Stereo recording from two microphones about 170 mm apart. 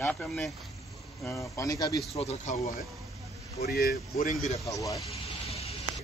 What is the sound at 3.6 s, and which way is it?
Speech, 65° left (ahead or behind).